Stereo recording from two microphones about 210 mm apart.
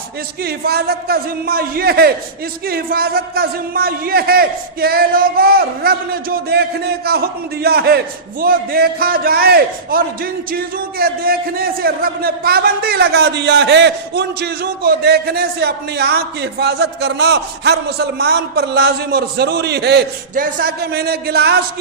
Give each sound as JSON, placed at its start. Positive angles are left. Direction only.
{"t": 0.4, "sound": "a man's voice", "side_deg": -50}